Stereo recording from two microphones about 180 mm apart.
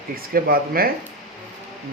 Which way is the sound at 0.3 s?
55° right (ahead or behind).